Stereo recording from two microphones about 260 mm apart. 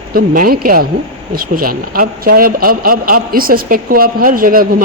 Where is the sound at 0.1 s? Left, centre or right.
Right.